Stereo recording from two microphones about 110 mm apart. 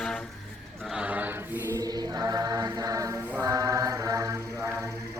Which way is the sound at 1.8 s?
35° right (ahead or behind).